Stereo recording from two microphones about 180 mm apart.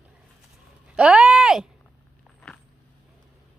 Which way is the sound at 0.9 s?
5° right (ahead or behind).